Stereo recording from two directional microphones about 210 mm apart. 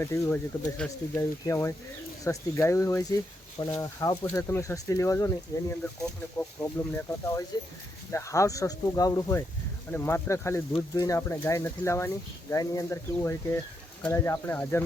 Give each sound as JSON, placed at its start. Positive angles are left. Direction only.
{"t": 0.0, "sound": "speech", "side_deg": 10}